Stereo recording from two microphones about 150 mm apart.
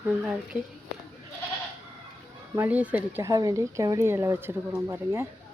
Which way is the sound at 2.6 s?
10° right (ahead or behind).